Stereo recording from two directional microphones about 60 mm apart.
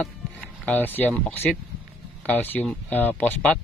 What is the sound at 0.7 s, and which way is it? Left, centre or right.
Speech, left.